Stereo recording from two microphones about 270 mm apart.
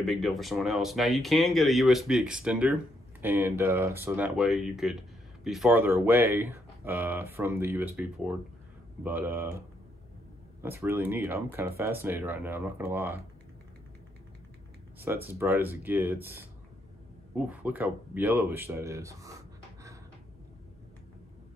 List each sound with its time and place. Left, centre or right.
0.0 s speech: centre
10.6 s speech: centre
15.0 s speech: centre